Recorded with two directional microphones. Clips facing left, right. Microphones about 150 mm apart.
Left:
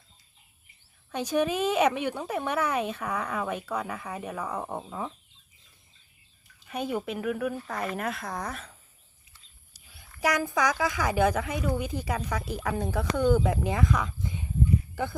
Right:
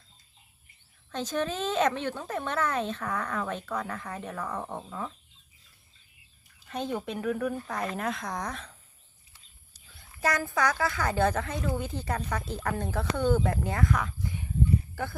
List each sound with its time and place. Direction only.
1.1 s speech: 10° left (ahead or behind)
6.7 s speech: 10° left (ahead or behind)
9.7 s a sound: 10° left (ahead or behind)
10.2 s speech: 15° left (ahead or behind)